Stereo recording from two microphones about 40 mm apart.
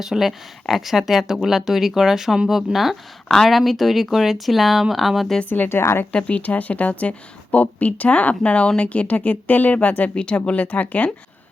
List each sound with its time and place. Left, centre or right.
0.0 s speech: centre
5.6 s speech: left
6.1 s speech: left
10.2 s speech: left